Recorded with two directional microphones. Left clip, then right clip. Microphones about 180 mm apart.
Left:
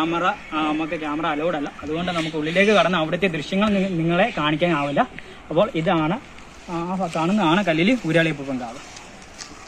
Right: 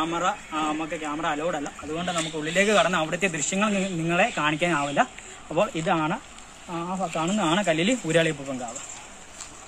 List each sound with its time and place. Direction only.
0.0 s a man's voice: 15° right (ahead or behind)
6.7 s speech: 15° right (ahead or behind); by 8.4 s 30° right (ahead or behind)